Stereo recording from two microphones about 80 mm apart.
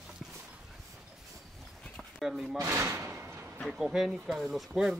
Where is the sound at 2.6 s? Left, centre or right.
Right.